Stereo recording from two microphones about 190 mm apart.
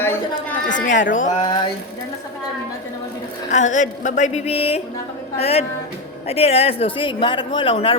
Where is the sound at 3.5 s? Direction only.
40° left (ahead or behind).